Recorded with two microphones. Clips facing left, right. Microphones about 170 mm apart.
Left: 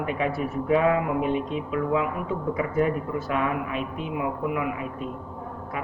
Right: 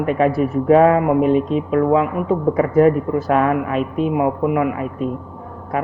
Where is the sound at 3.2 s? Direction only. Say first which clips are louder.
Right 10 dB; 55° right (ahead or behind).